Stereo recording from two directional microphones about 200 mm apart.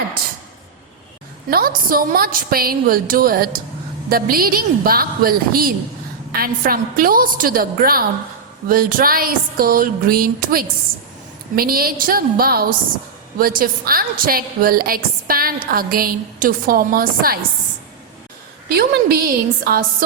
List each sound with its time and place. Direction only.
1.5 s a woman's voice: 45° right (ahead or behind)
18.7 s a woman's voice: 50° right (ahead or behind)